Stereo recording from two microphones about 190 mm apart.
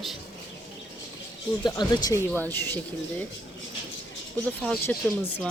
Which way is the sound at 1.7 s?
20° left (ahead or behind).